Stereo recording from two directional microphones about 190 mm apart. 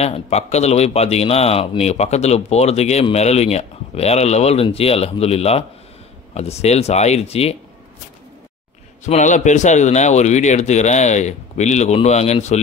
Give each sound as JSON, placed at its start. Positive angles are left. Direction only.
{"t": 0.0, "sound": "speech", "side_deg": 35}
{"t": 9.0, "sound": "speech", "side_deg": 40}